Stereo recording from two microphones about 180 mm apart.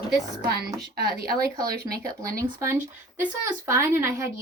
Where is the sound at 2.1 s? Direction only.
20° right (ahead or behind).